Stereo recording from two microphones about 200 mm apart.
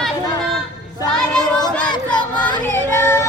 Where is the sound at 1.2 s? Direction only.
5° left (ahead or behind).